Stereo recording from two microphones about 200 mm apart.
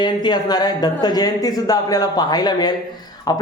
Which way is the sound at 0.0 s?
20° left (ahead or behind).